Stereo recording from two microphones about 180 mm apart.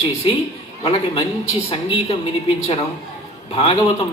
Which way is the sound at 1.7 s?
30° left (ahead or behind).